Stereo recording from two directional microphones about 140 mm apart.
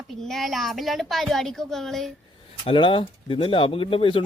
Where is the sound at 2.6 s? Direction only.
40° left (ahead or behind).